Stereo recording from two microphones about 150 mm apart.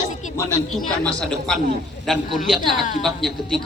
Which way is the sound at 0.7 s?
Centre (ahead or behind).